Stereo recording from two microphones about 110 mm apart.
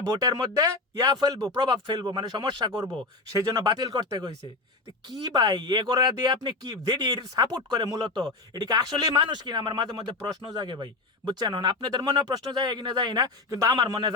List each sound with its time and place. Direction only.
0.2 s speech: 35° right (ahead or behind)
5.3 s a man's voice: 40° right (ahead or behind)